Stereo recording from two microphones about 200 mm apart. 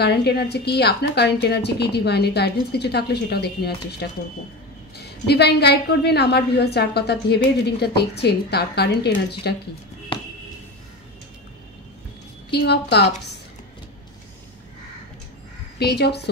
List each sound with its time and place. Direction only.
0.0 s a woman's voice: 55° left (ahead or behind)
10.1 s a sound: 25° left (ahead or behind)
12.4 s a woman's voice: 55° left (ahead or behind)
15.8 s a woman's voice: 55° left (ahead or behind)